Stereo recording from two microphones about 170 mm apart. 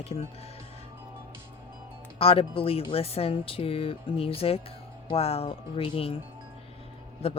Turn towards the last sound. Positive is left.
turn(degrees=35)  # may be behind; listen again after turning